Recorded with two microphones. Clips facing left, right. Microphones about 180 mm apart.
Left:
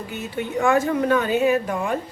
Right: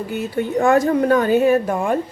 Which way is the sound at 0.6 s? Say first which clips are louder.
Right 4 dB; 35° right (ahead or behind).